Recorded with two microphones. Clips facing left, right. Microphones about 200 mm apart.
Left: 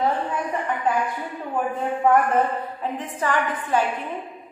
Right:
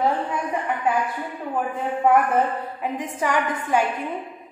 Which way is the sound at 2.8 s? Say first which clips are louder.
Right 3 dB; 15° right (ahead or behind).